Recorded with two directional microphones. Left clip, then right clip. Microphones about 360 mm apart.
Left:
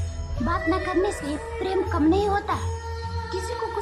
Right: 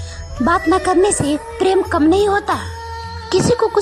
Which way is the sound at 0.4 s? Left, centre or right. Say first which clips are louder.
Right 10 dB; centre.